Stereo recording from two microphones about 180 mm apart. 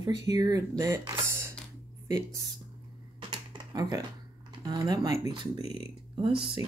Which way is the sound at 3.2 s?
25° right (ahead or behind).